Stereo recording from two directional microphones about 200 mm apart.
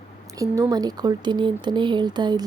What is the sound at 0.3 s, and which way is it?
Speech, 15° right (ahead or behind).